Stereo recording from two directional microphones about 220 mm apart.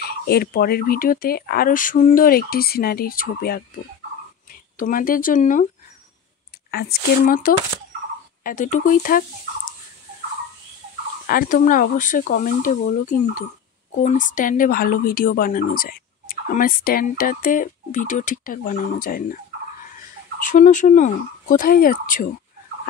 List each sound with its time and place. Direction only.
0.0 s speech: 45° left (ahead or behind)
4.7 s speech: 40° left (ahead or behind)
6.7 s speech: 45° left (ahead or behind)
11.2 s speech: 40° left (ahead or behind)
20.3 s speech: 35° left (ahead or behind)